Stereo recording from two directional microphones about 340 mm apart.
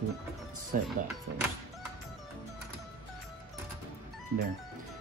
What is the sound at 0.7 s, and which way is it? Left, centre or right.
Speech, right.